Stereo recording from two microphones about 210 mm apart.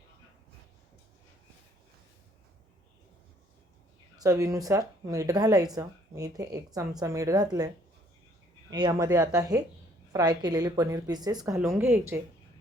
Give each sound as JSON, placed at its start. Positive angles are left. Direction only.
{"t": 4.2, "sound": "a woman's voice", "side_deg": -15}
{"t": 8.7, "sound": "a woman's voice", "side_deg": -20}